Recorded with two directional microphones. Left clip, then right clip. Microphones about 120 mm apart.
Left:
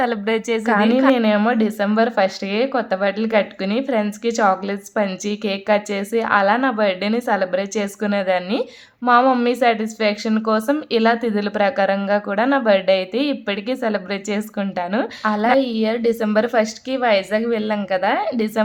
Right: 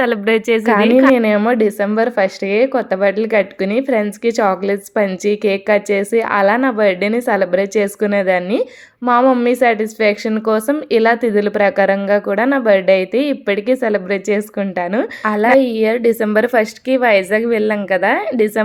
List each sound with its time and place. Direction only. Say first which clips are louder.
0.0 s a woman's voice: right 5 dB; 30° right (ahead or behind)
9.0 s a woman's voice: right 2 dB; 15° right (ahead or behind)
9.5 s a woman's voice: right 4 dB; 30° right (ahead or behind)